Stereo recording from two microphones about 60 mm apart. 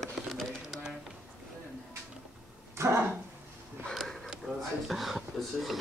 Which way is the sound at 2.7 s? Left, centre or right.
Right.